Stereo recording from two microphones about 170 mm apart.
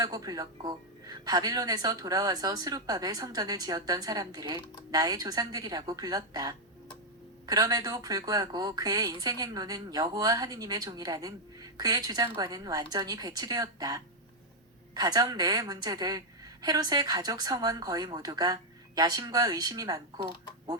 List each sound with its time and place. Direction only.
0.0 s a woman's voice: 20° right (ahead or behind)